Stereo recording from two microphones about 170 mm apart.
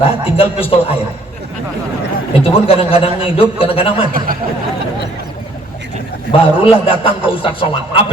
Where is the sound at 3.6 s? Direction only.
30° left (ahead or behind).